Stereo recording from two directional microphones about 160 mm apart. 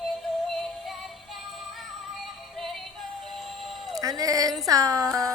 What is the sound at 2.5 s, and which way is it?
Synthetic singing, centre (ahead or behind).